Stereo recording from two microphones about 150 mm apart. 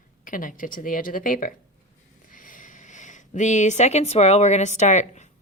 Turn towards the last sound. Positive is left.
turn(degrees=50)  # may be behind; listen again after turning